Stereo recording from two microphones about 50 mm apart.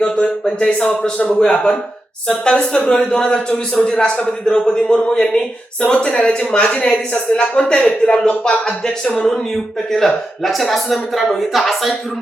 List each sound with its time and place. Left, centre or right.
0.4 s a man's voice: centre